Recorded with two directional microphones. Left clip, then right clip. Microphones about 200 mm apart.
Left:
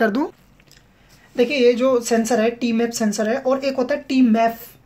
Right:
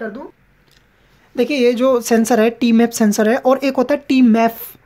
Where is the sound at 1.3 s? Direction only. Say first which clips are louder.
Right 1 dB; 30° right (ahead or behind).